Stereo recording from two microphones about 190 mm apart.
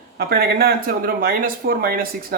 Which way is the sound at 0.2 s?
55° right (ahead or behind).